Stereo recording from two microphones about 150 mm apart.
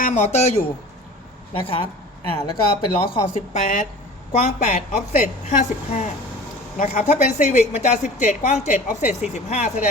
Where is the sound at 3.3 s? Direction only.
50° left (ahead or behind).